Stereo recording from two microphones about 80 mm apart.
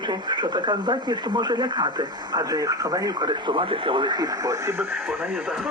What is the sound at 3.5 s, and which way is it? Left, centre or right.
Speech, right.